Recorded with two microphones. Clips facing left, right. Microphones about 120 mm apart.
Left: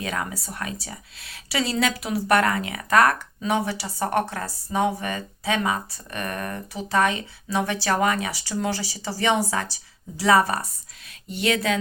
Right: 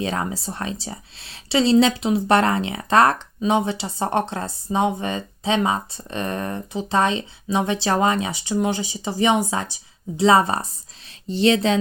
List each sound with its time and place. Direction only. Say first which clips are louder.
0.0 s speech: right 4 dB; 30° right (ahead or behind)